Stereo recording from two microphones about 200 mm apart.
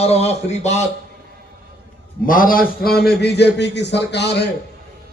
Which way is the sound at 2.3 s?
45° left (ahead or behind).